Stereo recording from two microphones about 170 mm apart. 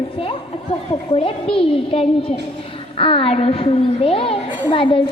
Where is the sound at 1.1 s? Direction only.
35° left (ahead or behind).